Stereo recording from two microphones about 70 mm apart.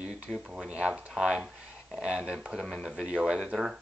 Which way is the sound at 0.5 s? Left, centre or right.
Centre.